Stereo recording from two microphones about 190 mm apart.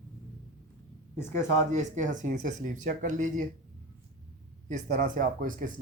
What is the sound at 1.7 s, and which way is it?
Speech, 40° right (ahead or behind).